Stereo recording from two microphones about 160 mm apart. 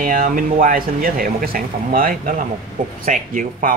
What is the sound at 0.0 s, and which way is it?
Speech, 60° right (ahead or behind).